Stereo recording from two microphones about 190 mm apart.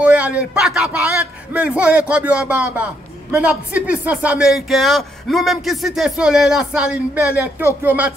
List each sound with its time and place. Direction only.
0.0 s a man's voice: 5° right (ahead or behind)